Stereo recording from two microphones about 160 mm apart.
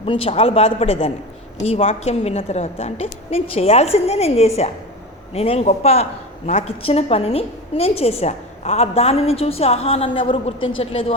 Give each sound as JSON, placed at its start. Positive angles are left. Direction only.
{"t": 0.0, "sound": "speech", "side_deg": 35}